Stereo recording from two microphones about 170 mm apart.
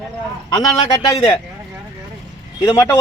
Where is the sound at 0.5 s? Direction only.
20° left (ahead or behind).